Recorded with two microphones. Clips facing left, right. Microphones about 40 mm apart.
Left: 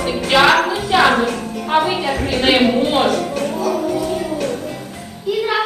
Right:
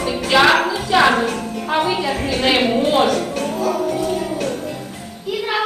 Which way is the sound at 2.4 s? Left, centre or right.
Left.